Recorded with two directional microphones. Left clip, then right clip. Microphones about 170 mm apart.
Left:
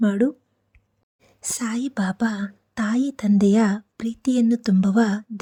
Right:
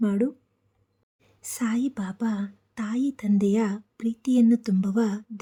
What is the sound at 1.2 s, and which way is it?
A woman's voice, 35° left (ahead or behind).